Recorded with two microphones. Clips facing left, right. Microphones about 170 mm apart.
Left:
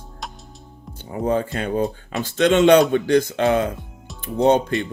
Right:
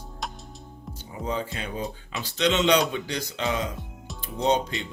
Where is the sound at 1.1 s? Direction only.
55° left (ahead or behind).